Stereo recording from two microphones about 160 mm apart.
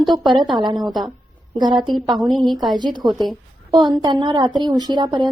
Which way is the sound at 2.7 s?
25° right (ahead or behind).